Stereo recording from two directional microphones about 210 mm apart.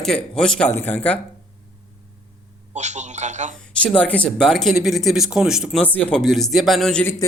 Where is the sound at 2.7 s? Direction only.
35° right (ahead or behind).